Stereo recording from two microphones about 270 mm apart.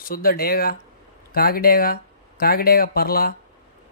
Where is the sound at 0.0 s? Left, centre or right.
Left.